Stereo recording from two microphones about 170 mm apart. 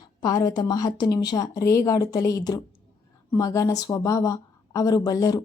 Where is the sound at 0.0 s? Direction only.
20° left (ahead or behind).